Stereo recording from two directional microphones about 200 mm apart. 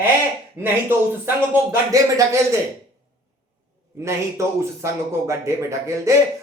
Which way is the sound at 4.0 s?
15° right (ahead or behind).